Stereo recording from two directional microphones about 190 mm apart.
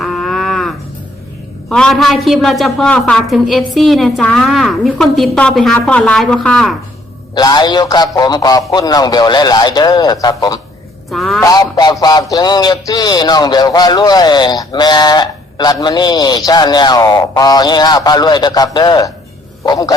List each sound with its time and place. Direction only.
0.0 s a sound: centre (ahead or behind)
1.7 s a woman's voice: centre (ahead or behind)
7.3 s music: 20° left (ahead or behind)
11.1 s a woman's voice: centre (ahead or behind)
11.4 s music: 20° left (ahead or behind)